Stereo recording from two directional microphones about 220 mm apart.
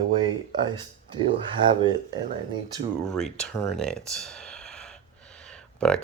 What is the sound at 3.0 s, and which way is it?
Speech, 5° left (ahead or behind).